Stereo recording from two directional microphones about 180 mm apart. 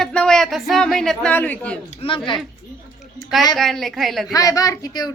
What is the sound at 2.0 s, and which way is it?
Speech, 35° left (ahead or behind).